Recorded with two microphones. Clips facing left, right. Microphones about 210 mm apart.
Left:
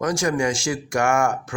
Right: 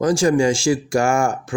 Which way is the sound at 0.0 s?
30° right (ahead or behind).